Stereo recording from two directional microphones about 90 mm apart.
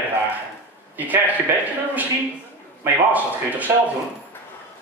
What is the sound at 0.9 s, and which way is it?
Speech, 20° right (ahead or behind).